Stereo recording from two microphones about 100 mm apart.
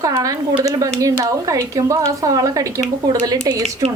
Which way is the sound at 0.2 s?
35° right (ahead or behind).